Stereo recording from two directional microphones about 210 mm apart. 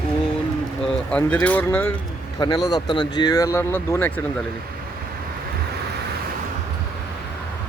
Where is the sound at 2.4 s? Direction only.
20° left (ahead or behind).